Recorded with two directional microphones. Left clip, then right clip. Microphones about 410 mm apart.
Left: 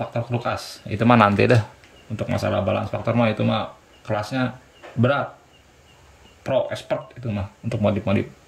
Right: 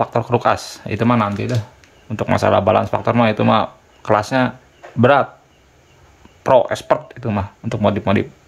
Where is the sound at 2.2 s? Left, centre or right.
Centre.